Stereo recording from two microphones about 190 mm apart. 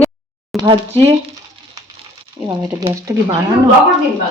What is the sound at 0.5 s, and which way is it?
Speech, 25° right (ahead or behind).